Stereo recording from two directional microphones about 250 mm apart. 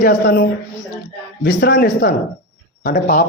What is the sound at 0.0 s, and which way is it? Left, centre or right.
Speech, left.